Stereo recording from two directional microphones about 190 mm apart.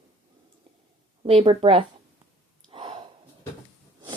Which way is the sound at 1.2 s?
30° right (ahead or behind).